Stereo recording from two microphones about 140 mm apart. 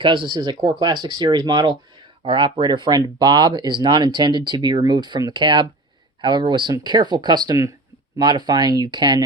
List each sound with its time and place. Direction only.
0.0 s speech: 35° right (ahead or behind)